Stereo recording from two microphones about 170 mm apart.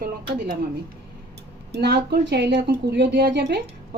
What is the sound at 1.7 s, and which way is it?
A woman's voice, 80° right.